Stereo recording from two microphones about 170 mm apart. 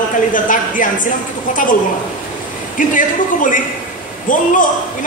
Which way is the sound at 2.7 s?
50° left (ahead or behind).